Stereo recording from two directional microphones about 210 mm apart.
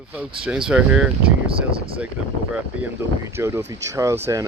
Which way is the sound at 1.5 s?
25° right (ahead or behind).